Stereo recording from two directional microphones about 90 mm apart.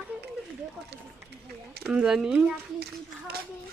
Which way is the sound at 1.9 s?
5° right (ahead or behind).